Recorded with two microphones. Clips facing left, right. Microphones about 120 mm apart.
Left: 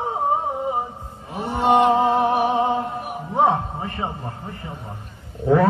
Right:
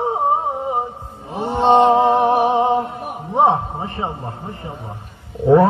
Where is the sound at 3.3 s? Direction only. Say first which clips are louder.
Right 3 dB; 25° right (ahead or behind).